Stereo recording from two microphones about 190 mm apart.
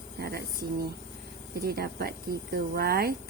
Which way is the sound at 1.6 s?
55° right (ahead or behind).